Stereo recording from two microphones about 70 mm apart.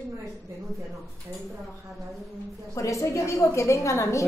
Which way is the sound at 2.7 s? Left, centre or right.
Left.